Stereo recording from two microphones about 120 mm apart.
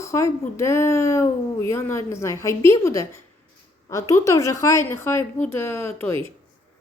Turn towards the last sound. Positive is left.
turn(degrees=20)  # may be behind; listen again after turning